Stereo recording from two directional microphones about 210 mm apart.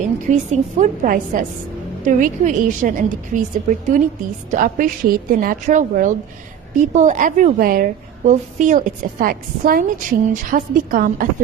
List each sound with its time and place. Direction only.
0.3 s a woman's voice: 35° right (ahead or behind)